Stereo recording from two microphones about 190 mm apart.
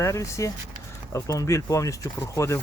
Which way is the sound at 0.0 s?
15° left (ahead or behind).